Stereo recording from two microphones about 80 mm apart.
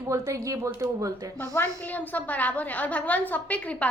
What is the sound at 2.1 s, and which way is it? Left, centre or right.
A woman's voice, centre.